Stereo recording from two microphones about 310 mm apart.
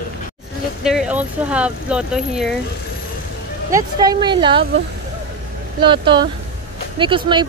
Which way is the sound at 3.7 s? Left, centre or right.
Centre.